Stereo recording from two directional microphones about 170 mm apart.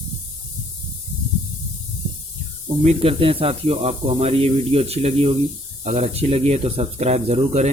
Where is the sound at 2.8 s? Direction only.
35° right (ahead or behind).